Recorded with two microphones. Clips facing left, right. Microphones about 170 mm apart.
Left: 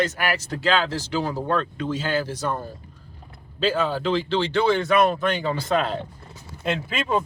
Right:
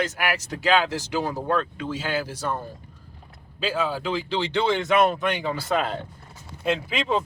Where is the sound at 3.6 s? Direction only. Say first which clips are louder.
Left 3 dB; 10° right (ahead or behind).